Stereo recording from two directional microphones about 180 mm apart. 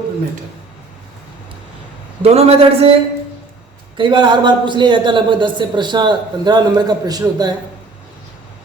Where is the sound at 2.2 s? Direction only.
35° right (ahead or behind).